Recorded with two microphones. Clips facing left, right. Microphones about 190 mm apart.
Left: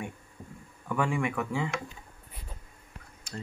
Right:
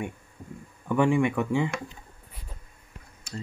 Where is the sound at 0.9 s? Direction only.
20° right (ahead or behind).